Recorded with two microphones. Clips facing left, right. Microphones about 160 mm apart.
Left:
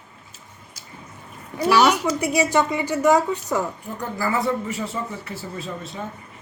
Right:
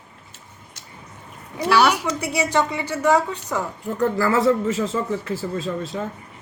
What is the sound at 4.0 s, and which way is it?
A man's voice, 85° right.